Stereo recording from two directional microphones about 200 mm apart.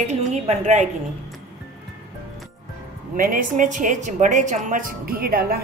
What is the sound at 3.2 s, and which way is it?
A woman's voice, 45° right (ahead or behind).